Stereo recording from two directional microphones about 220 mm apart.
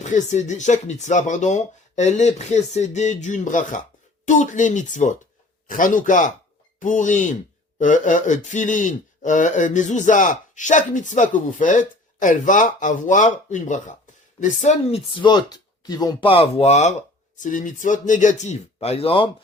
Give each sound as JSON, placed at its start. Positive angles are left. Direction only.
{"t": 0.0, "sound": "speech", "side_deg": 30}